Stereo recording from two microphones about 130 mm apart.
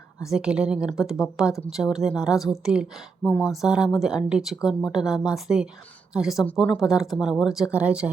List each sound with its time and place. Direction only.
0.3 s speech: 5° right (ahead or behind)